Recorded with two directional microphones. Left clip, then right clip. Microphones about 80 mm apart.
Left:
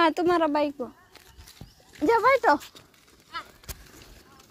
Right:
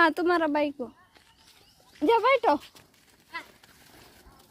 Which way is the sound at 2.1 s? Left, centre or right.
Centre.